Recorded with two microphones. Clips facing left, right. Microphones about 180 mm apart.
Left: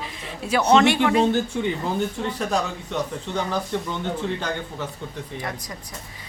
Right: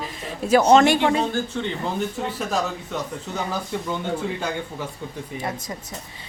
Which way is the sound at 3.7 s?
5° right (ahead or behind).